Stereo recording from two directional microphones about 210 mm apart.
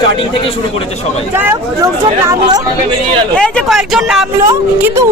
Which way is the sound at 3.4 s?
Centre (ahead or behind).